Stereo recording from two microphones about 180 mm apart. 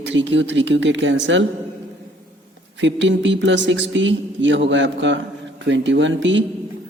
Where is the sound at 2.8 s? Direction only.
90° right.